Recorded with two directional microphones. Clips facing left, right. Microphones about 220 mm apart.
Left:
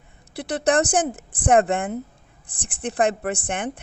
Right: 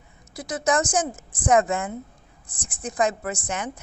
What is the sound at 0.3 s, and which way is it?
A woman's voice, 65° left (ahead or behind).